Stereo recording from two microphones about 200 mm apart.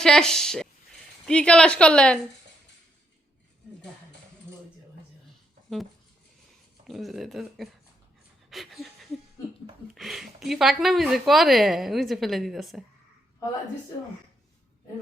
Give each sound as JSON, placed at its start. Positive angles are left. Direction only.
{"t": 0.0, "sound": "speech", "side_deg": 5}
{"t": 6.8, "sound": "speech", "side_deg": 0}
{"t": 8.4, "sound": "a sound", "side_deg": 0}
{"t": 9.9, "sound": "speech", "side_deg": 0}